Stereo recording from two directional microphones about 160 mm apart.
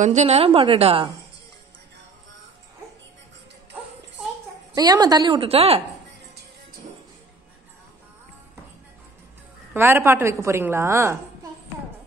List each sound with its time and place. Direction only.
0.0 s a woman's voice: 45° right (ahead or behind)
4.7 s a woman's voice: 25° right (ahead or behind)
9.8 s a woman's voice: 15° right (ahead or behind)